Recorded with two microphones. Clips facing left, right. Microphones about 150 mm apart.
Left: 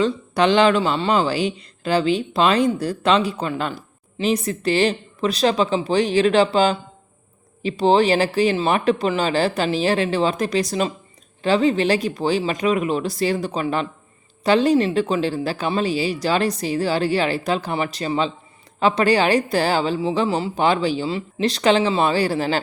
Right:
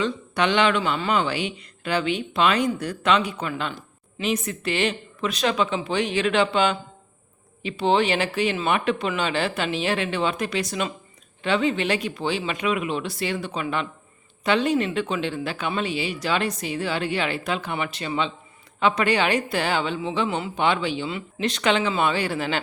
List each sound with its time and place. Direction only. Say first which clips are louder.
0.0 s speech: left 5 dB; 35° left (ahead or behind)